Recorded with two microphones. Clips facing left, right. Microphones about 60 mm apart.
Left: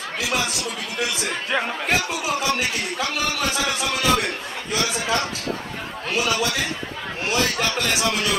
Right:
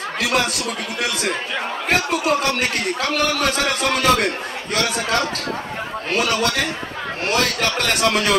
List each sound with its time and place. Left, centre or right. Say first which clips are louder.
0.2 s a man's voice: right 5 dB; right
1.9 s a man's voice: right 8 dB; right